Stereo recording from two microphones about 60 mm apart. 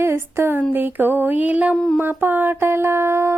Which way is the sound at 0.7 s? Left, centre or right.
Right.